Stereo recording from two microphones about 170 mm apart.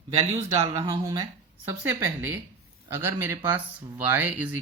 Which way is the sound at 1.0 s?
20° right (ahead or behind).